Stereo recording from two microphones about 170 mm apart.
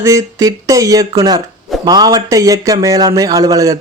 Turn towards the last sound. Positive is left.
turn(degrees=-20)  # may be behind; listen again after turning